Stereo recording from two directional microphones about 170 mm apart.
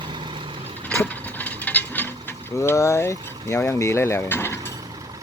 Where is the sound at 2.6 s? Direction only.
15° left (ahead or behind).